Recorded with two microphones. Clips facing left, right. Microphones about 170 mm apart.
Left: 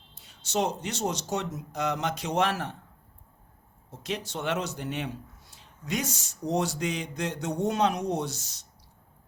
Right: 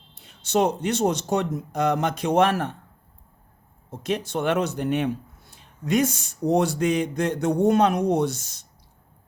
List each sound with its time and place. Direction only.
0.1 s speech: 60° right (ahead or behind)
3.9 s speech: 55° right (ahead or behind)